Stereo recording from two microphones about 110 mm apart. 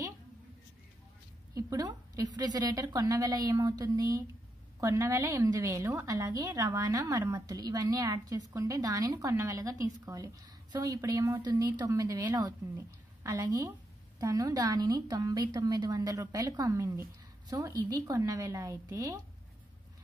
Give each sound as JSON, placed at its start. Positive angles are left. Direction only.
{"t": 1.5, "sound": "a woman's voice", "side_deg": -30}
{"t": 11.4, "sound": "a woman's voice", "side_deg": -35}